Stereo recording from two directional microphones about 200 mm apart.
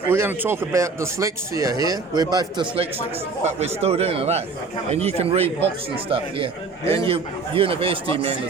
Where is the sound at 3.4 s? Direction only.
30° right (ahead or behind).